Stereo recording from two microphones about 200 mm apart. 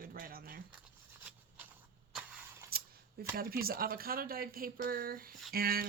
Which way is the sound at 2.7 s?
50° right (ahead or behind).